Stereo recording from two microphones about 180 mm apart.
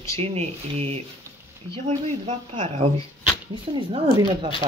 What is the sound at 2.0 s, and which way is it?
Speech, 40° right (ahead or behind).